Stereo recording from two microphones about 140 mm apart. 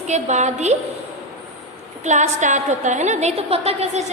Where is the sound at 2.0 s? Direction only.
60° right (ahead or behind).